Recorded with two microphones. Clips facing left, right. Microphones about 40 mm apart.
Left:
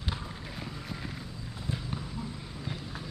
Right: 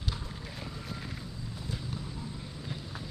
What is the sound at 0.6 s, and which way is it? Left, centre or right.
Vehicle, centre.